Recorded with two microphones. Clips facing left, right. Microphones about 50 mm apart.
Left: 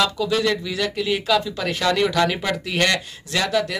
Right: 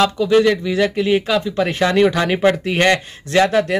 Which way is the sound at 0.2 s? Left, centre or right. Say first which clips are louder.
Right 7 dB; right.